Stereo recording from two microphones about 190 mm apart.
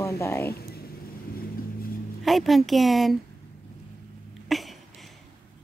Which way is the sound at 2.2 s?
Centre (ahead or behind).